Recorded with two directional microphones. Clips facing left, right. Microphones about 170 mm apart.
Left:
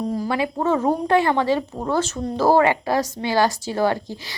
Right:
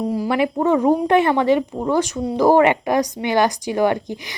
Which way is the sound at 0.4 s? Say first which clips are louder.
Right 4 dB; 15° right (ahead or behind).